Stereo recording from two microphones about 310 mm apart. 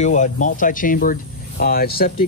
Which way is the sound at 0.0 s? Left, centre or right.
Left.